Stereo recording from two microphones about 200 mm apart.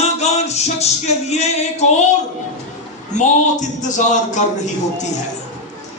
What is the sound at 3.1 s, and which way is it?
Music, 40° left (ahead or behind).